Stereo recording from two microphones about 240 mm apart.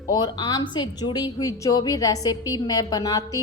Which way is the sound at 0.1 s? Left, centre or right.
Centre.